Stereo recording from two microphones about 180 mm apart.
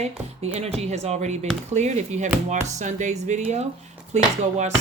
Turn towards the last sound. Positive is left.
turn(degrees=-40)  # may be behind; listen again after turning